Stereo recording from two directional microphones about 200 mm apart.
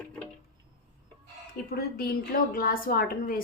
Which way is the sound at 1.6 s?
45° left (ahead or behind).